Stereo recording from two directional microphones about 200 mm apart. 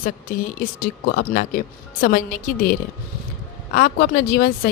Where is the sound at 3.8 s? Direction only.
45° left (ahead or behind).